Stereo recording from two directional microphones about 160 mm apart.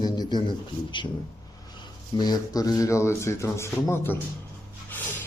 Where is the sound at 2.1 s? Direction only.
25° left (ahead or behind).